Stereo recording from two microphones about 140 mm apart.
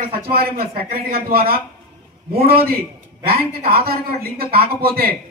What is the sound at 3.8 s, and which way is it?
A man's voice, 90° right.